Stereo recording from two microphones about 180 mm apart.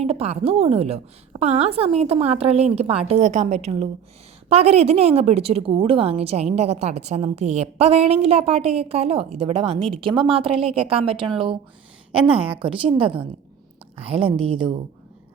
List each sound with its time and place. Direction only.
0.0 s a woman's voice: 35° right (ahead or behind)